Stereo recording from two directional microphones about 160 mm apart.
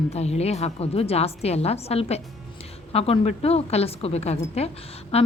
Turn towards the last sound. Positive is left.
turn(degrees=40)  # may be behind; listen again after turning